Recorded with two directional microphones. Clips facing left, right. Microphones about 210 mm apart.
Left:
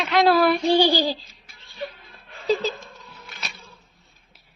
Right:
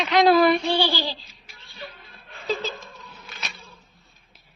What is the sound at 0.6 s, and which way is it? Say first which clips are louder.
Child singing: left 5 dB; 40° left (ahead or behind).